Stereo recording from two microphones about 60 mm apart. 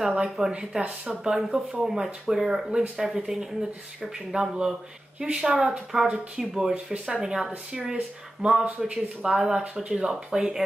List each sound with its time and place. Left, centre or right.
0.0 s speech: centre
8.6 s a man's voice: right
8.9 s speech: centre